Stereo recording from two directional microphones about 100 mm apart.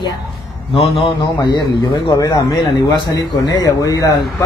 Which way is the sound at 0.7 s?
65° left (ahead or behind).